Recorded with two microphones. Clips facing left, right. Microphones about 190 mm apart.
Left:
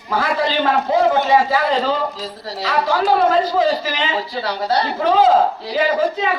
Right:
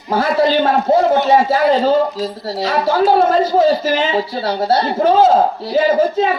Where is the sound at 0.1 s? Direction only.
45° right (ahead or behind).